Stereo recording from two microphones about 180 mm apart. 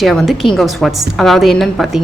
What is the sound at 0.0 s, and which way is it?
Speech, centre (ahead or behind).